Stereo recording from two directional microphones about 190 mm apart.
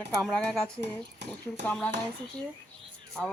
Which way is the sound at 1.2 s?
65° right (ahead or behind).